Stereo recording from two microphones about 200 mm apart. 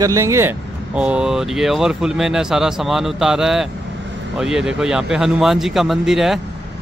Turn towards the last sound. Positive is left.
turn(degrees=0)  # may be behind; listen again after turning